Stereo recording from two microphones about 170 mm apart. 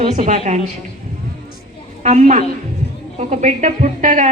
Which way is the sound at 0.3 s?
40° right (ahead or behind).